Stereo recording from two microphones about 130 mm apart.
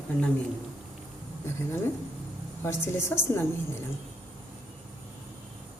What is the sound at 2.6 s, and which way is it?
Speech, 20° left (ahead or behind).